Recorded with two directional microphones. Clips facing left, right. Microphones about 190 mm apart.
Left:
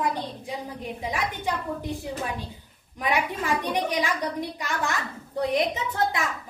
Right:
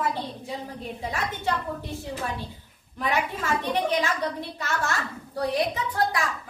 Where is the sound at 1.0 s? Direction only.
15° left (ahead or behind).